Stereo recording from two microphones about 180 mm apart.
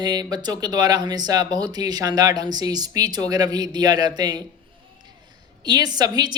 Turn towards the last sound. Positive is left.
turn(degrees=-20)  # may be behind; listen again after turning